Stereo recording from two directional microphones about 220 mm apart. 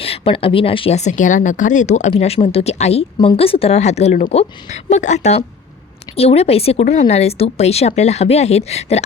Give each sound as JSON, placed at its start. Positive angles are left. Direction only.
{"t": 0.0, "sound": "speech", "side_deg": 25}